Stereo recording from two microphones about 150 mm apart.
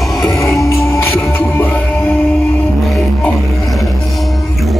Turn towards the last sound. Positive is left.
turn(degrees=0)  # may be behind; listen again after turning